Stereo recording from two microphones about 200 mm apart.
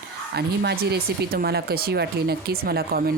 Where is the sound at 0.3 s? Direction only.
55° right (ahead or behind).